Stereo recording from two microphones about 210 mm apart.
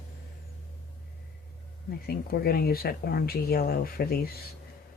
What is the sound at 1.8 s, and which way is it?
Speech, 45° left (ahead or behind).